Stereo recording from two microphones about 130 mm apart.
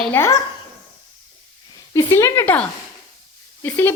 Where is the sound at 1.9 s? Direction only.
20° left (ahead or behind).